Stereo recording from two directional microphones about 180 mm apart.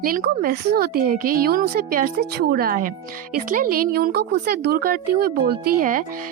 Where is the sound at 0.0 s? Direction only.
50° right (ahead or behind).